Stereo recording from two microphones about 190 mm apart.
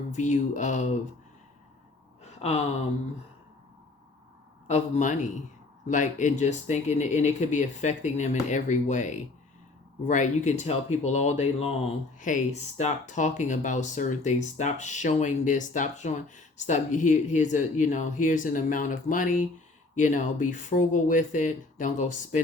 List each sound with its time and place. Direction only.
0.1 s speech: 40° left (ahead or behind)
2.4 s speech: 35° left (ahead or behind)
4.7 s speech: 40° left (ahead or behind)